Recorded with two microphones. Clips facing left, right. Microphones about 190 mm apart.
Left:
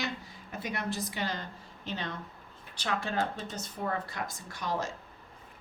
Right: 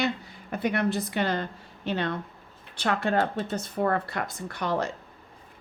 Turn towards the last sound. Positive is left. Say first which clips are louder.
# right 6 dB
turn(degrees=-60)  # may be behind; listen again after turning